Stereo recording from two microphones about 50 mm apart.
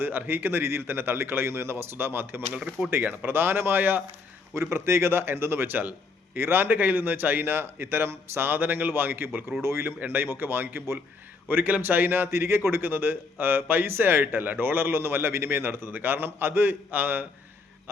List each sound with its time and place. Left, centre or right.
0.3 s a man's voice: right
2.6 s speech: centre
3.0 s a man's voice: right
4.5 s a man's voice: right
9.6 s speech: right
10.1 s a man's voice: right